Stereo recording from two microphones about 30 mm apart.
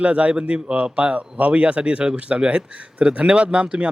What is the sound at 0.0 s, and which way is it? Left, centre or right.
Speech, right.